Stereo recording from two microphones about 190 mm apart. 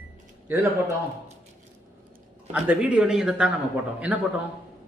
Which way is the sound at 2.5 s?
5° right (ahead or behind).